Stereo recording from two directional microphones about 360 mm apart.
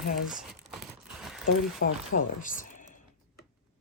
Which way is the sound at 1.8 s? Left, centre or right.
Left.